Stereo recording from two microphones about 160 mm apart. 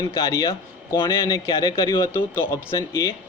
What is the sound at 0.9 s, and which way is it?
A man's voice, 30° left (ahead or behind).